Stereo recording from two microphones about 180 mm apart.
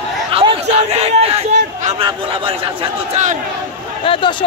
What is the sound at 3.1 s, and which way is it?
Speech, 45° right (ahead or behind).